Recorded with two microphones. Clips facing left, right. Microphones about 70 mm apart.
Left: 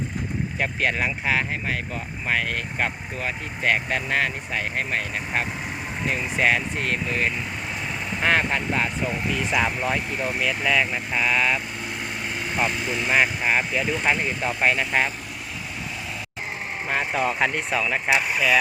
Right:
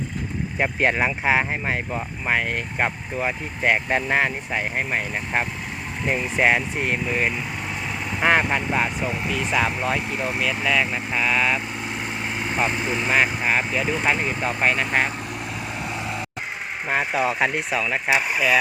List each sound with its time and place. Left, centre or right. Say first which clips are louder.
0.6 s speech: right 4 dB; right; by 10.2 s centre
10.2 s speech: right 1 dB; centre
10.4 s speech: even; centre
12.6 s speech: right 1 dB; right
13.5 s speech: right 1 dB; centre
16.9 s speech: right 2 dB; centre